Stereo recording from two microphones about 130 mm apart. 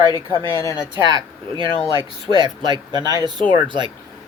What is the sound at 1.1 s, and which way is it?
Speech, 35° right (ahead or behind).